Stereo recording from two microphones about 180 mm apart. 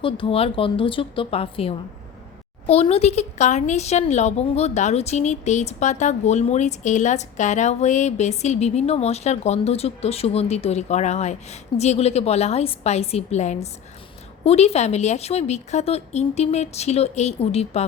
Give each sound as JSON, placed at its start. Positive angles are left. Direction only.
{"t": 0.0, "sound": "a woman's voice", "side_deg": 30}